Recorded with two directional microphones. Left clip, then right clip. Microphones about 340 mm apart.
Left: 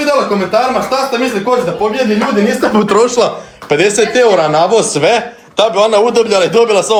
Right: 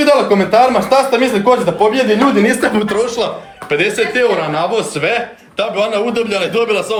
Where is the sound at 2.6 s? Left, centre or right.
Left.